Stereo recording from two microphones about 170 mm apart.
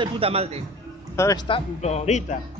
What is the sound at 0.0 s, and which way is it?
Speech, 35° right (ahead or behind).